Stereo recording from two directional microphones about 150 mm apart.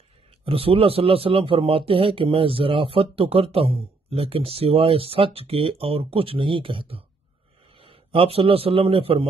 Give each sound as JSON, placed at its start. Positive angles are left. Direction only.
{"t": 0.5, "sound": "a man's voice", "side_deg": -40}